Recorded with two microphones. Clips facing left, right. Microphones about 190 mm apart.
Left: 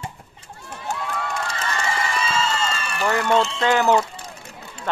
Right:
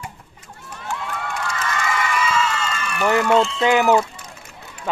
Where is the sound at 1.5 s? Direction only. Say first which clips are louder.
Right 2 dB; 35° left (ahead or behind).